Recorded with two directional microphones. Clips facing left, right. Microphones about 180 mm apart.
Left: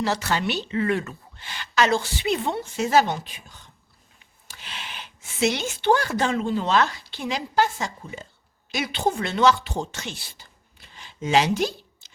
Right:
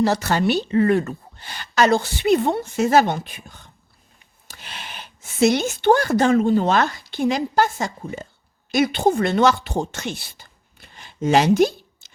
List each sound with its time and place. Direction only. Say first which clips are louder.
0.0 s a woman's voice: right 6 dB; 40° right (ahead or behind)